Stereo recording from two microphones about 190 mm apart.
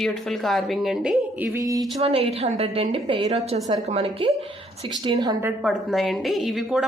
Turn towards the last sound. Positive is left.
turn(degrees=0)  # may be behind; listen again after turning